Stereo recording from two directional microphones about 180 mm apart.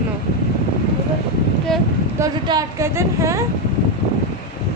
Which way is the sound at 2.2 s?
20° right (ahead or behind).